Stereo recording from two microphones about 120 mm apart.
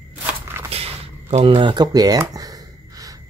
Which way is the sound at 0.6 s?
55° right (ahead or behind).